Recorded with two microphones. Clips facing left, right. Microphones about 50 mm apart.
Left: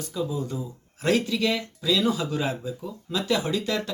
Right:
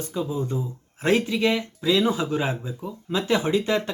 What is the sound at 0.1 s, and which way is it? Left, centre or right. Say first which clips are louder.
Speech: right 2 dB; right.